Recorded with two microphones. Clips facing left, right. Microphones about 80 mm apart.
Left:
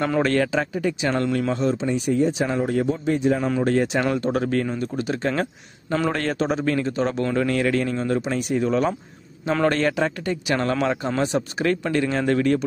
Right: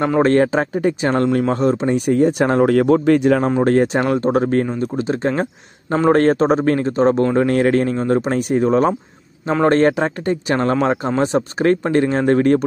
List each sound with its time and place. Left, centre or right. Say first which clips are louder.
0.2 s speech: right 9 dB; right
3.6 s a man's voice: right 5 dB; right